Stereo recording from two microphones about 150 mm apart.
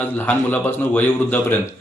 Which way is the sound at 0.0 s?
15° left (ahead or behind).